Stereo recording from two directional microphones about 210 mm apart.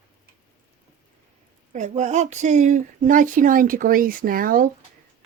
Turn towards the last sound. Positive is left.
turn(degrees=-40)  # may be behind; listen again after turning